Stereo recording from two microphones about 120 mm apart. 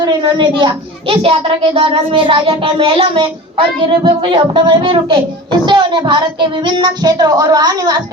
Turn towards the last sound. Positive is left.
turn(degrees=-30)  # may be behind; listen again after turning